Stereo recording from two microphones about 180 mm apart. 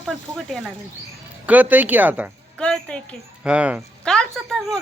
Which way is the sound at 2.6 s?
5° left (ahead or behind).